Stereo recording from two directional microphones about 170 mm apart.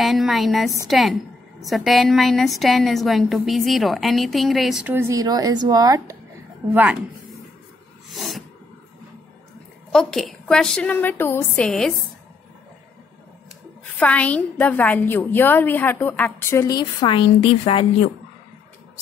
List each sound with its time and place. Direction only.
0.0 s a woman's voice: centre (ahead or behind)
4.9 s speech: 20° right (ahead or behind)
8.1 s a sound: centre (ahead or behind)
9.9 s a woman's voice: centre (ahead or behind)
11.6 s a woman's voice: centre (ahead or behind)
13.9 s a woman's voice: 10° left (ahead or behind); by 17.8 s 30° left (ahead or behind)